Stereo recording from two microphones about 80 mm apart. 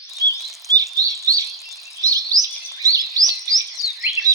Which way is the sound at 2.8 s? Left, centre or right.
Right.